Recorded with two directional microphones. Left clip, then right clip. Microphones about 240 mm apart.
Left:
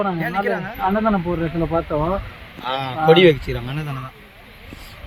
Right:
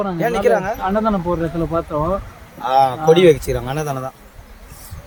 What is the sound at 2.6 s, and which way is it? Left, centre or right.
Speech, right.